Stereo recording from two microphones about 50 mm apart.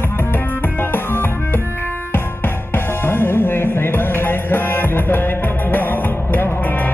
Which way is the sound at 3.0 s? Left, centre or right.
Left.